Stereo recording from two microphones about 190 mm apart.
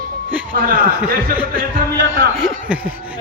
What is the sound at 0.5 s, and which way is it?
Speech, 50° right (ahead or behind).